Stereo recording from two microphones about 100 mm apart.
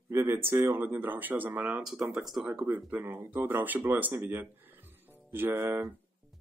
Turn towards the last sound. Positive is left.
turn(degrees=-25)  # may be behind; listen again after turning